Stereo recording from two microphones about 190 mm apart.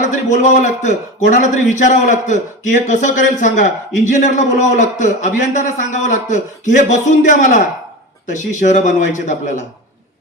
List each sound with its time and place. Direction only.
0.3 s a man's voice: 40° left (ahead or behind)